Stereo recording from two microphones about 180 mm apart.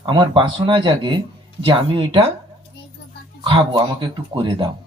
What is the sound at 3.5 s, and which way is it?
Speech, 25° right (ahead or behind).